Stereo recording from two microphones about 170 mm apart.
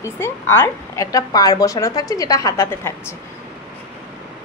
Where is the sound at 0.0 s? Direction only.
15° left (ahead or behind).